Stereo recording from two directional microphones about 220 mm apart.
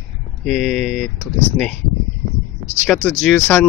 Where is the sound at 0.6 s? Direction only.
35° right (ahead or behind).